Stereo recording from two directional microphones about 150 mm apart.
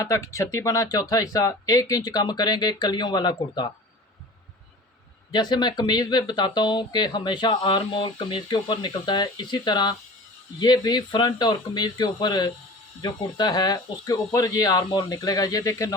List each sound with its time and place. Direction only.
0.0 s speech: 20° left (ahead or behind)
5.3 s speech: 30° left (ahead or behind)